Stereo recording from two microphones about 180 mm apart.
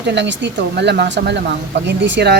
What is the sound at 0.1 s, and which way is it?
Speech, 75° right (ahead or behind).